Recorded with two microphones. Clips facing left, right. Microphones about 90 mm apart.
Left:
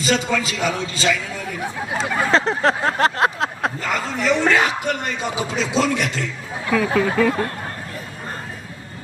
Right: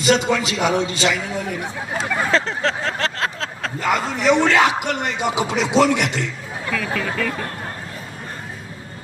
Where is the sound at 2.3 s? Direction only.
35° left (ahead or behind).